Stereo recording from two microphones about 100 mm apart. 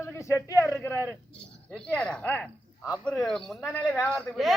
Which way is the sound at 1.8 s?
10° left (ahead or behind).